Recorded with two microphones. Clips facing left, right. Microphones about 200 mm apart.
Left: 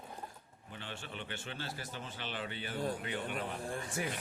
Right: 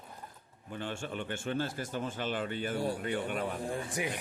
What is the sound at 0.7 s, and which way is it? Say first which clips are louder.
Speech: right 8 dB; 50° right (ahead or behind).